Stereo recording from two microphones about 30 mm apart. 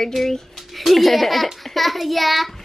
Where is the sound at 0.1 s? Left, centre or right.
Centre.